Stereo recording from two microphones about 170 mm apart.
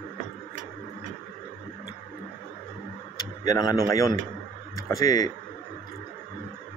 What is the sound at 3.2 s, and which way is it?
Tick-tock, 25° left (ahead or behind).